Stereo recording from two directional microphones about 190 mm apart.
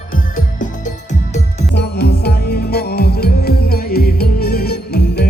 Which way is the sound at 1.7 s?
60° left (ahead or behind).